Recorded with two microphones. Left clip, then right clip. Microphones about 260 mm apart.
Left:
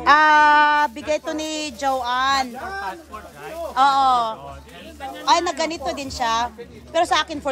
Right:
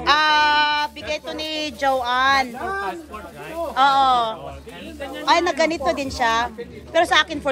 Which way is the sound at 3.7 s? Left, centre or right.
Centre.